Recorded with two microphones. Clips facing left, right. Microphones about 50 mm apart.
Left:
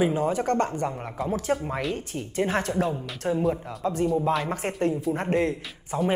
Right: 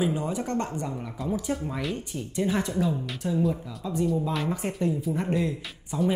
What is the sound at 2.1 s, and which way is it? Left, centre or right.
Speech, left.